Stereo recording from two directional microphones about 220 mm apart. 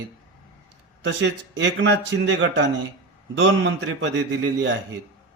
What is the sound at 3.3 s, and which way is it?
Speech, 55° right (ahead or behind).